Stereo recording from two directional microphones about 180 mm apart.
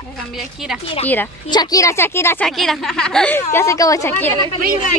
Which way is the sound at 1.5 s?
20° left (ahead or behind).